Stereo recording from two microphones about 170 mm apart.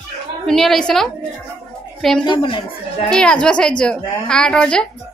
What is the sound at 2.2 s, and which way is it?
Speech, 30° left (ahead or behind).